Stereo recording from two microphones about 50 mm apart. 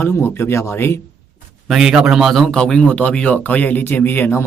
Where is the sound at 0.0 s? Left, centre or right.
Left.